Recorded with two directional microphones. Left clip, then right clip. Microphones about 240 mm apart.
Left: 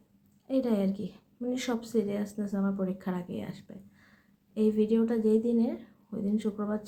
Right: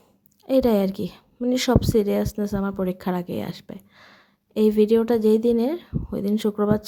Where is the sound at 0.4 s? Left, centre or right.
Right.